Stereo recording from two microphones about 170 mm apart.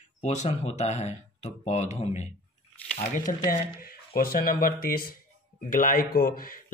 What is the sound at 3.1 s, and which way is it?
Speech, 55° left (ahead or behind).